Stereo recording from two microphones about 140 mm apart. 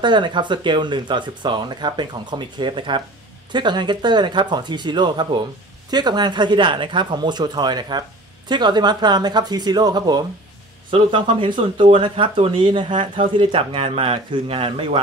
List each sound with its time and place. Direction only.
0.0 s speech: 35° right (ahead or behind)